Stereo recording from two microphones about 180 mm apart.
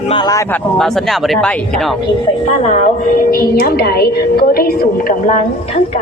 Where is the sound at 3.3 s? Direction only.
55° left (ahead or behind).